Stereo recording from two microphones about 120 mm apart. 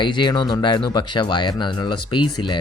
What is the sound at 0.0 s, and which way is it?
Speech, 40° left (ahead or behind).